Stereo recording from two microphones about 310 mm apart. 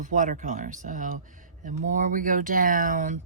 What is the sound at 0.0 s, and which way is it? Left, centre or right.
Speech, right.